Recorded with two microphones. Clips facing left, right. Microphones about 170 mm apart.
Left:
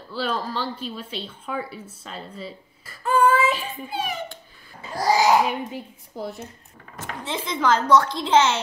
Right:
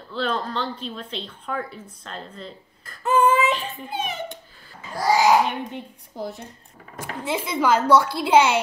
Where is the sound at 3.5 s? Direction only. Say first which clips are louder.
Even; 10° left (ahead or behind).